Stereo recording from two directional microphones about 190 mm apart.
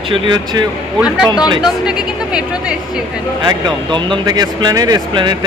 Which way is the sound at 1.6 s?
5° right (ahead or behind).